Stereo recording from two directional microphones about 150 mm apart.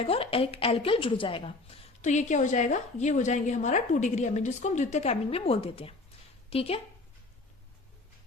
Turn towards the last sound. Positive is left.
turn(degrees=40)  # may be behind; listen again after turning